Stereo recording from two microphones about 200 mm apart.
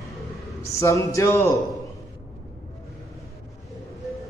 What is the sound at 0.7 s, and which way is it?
Speech, 15° left (ahead or behind).